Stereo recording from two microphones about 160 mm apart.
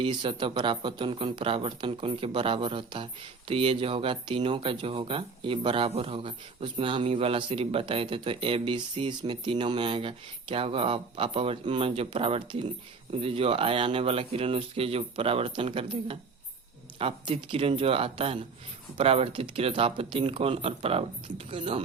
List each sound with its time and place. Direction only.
0.0 s speech: 30° right (ahead or behind)